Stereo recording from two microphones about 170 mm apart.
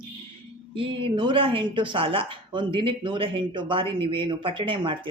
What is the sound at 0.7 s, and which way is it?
Speech, 30° right (ahead or behind).